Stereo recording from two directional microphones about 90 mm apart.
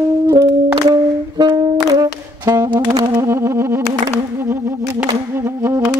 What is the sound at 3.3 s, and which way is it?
Music, 30° right (ahead or behind).